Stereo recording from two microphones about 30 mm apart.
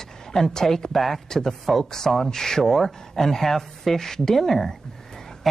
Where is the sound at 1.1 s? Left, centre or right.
Centre.